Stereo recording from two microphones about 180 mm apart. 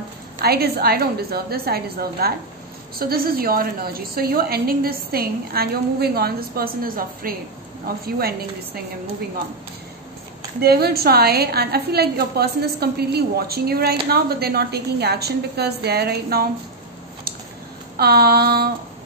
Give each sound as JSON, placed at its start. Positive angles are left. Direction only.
{"t": 0.4, "sound": "a woman's voice", "side_deg": -60}
{"t": 10.6, "sound": "a woman's voice", "side_deg": -60}
{"t": 17.9, "sound": "a woman's voice", "side_deg": -60}